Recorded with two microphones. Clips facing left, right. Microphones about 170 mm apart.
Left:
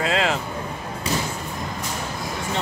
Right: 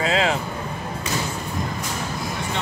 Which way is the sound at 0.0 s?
Centre (ahead or behind).